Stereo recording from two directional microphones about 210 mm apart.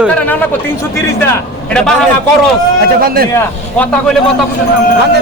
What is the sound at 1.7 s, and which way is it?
Speech, 5° left (ahead or behind).